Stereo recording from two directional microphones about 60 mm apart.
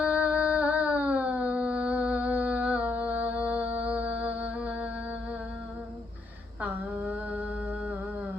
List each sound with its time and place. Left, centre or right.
0.0 s a sound: right
2.8 s music: right
6.6 s mantra: right